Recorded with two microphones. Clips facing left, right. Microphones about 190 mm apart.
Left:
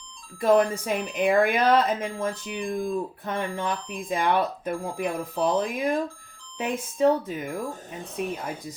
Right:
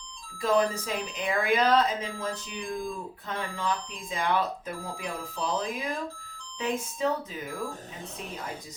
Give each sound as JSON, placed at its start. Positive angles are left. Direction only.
{"t": 0.4, "sound": "speech", "side_deg": 55}